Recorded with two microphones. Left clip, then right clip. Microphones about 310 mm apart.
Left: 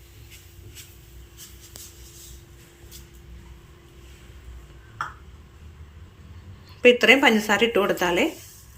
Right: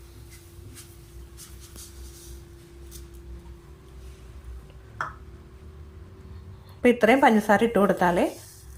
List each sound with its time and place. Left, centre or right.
6.8 s a woman's voice: right